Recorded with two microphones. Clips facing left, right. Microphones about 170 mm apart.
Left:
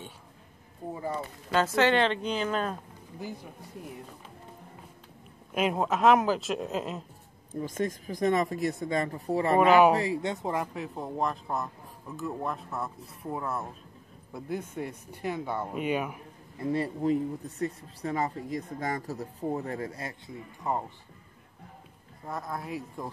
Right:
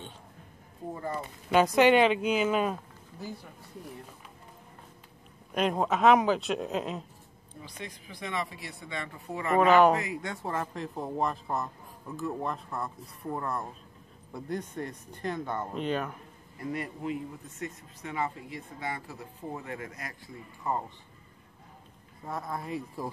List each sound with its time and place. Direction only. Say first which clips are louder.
1.1 s speech: right 4 dB; 15° right (ahead or behind)
5.5 s speech: even; 5° left (ahead or behind)
7.6 s speech: left 12 dB; 45° left (ahead or behind)
9.6 s speech: even; 10° left (ahead or behind)
9.9 s speech: left 5 dB; 30° left (ahead or behind); by 16.2 s 10° left (ahead or behind)
16.5 s speech: left 6 dB; 30° left (ahead or behind)
20.7 s speech: left 1 dB; 15° left (ahead or behind)
22.3 s speech: even; centre (ahead or behind)